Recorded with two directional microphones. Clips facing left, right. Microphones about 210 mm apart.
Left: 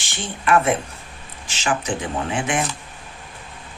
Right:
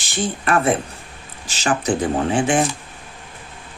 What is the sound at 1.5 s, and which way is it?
Speech, 35° right (ahead or behind).